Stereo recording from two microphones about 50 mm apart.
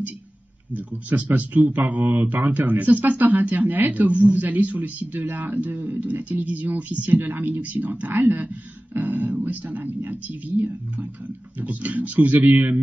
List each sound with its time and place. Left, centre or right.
0.7 s speech: right